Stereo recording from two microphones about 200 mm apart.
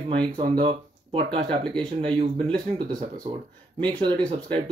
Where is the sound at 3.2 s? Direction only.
25° right (ahead or behind).